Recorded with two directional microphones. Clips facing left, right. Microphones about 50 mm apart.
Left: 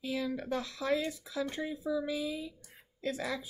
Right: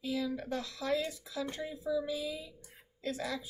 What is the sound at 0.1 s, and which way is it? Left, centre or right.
Speech, left.